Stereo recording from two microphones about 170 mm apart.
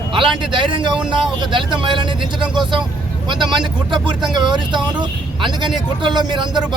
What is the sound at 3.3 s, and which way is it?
Speech, 30° right (ahead or behind).